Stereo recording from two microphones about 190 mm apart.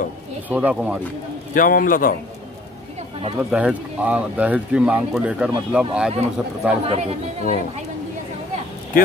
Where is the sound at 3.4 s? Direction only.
5° right (ahead or behind).